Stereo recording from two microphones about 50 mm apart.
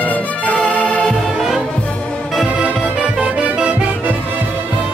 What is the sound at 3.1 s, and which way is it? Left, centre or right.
Music, right.